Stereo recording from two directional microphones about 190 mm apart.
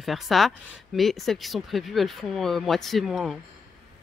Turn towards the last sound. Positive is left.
turn(degrees=0)  # may be behind; listen again after turning